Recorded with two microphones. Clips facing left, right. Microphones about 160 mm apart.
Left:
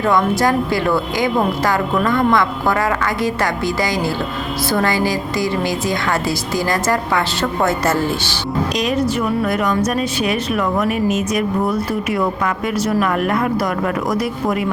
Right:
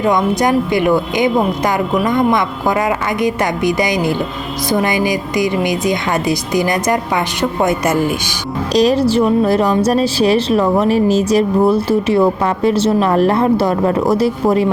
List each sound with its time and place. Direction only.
0.0 s speech: 20° right (ahead or behind)
8.7 s a woman's voice: 35° right (ahead or behind)